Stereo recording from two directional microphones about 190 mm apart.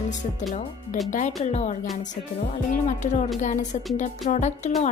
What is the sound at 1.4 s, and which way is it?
A woman's voice, 35° left (ahead or behind).